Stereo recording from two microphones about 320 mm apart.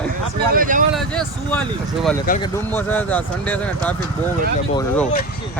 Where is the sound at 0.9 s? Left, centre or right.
Centre.